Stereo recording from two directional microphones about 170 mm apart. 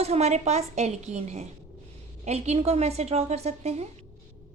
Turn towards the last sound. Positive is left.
turn(degrees=-40)  # may be behind; listen again after turning